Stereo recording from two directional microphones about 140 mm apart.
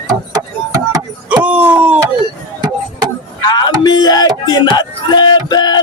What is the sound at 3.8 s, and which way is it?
Music, 30° left (ahead or behind).